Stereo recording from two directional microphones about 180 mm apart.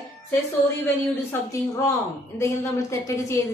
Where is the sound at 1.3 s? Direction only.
15° left (ahead or behind).